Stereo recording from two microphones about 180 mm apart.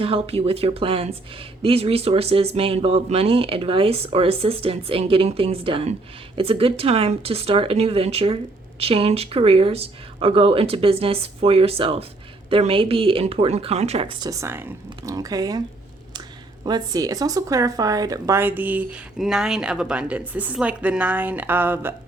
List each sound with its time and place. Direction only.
0.0 s speech: 30° right (ahead or behind)
16.6 s speech: 20° right (ahead or behind)